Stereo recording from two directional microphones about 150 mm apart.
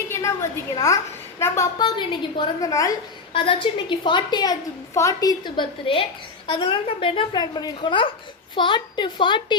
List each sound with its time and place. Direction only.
0.1 s a woman's voice: 20° left (ahead or behind)
1.8 s a woman's voice: 30° left (ahead or behind)
3.3 s a woman's voice: 35° left (ahead or behind)